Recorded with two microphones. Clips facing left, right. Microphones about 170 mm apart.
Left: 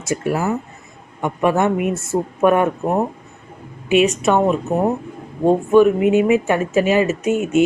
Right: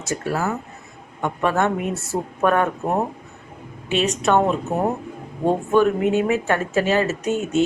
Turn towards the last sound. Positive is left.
turn(degrees=15)  # may be behind; listen again after turning